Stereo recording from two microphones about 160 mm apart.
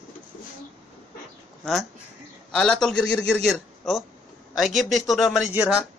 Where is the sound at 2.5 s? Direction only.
5° left (ahead or behind).